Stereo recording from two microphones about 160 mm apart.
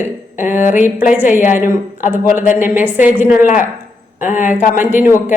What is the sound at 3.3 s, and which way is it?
A man's voice, 55° left (ahead or behind).